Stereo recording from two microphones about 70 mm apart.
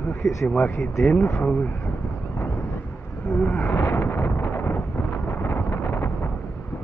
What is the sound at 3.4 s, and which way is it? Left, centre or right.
Speech, left.